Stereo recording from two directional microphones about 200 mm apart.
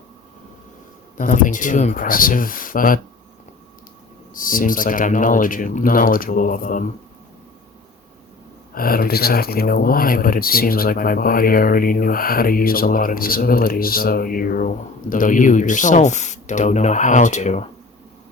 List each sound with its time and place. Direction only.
1.2 s speech: 40° left (ahead or behind)
4.4 s speech: 45° left (ahead or behind)
8.7 s speech: 45° left (ahead or behind)